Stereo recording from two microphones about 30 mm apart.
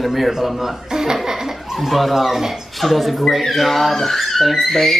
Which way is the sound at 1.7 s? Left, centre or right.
Centre.